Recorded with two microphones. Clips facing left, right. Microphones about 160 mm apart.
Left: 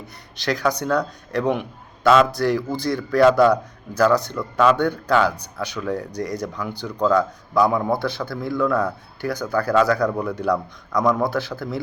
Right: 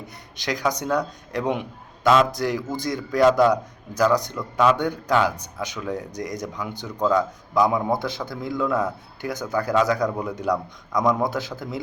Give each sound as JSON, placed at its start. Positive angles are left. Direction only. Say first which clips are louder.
{"t": 0.3, "sound": "a man's voice", "louder": "left 3 dB", "side_deg": -15}